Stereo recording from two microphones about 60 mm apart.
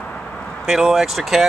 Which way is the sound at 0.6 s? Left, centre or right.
Centre.